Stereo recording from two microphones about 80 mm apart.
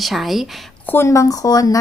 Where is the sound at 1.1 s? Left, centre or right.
Left.